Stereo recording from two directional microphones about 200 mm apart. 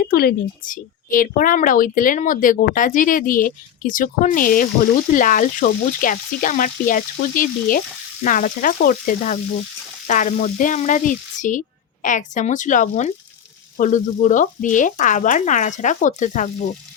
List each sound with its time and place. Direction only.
0.1 s speech: 50° left (ahead or behind)